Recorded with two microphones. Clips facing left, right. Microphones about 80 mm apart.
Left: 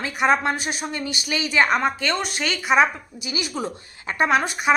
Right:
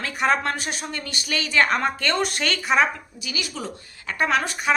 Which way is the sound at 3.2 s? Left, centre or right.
Left.